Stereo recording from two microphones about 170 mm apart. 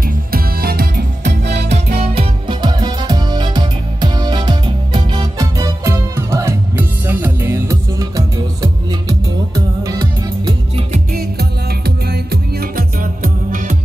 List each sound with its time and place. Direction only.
0.3 s music: 65° right (ahead or behind)
2.0 s music: 30° right (ahead or behind)
9.8 s music: 25° right (ahead or behind)
11.1 s music: 70° right (ahead or behind); by 13.7 s 50° right (ahead or behind)